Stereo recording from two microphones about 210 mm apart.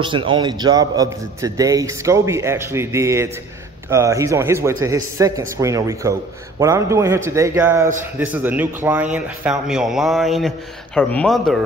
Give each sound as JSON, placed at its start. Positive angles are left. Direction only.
{"t": 0.0, "sound": "a man's voice", "side_deg": -25}